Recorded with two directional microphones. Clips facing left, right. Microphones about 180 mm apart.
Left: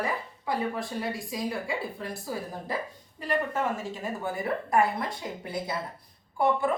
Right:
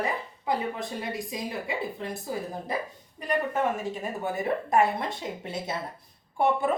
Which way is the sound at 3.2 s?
20° right (ahead or behind).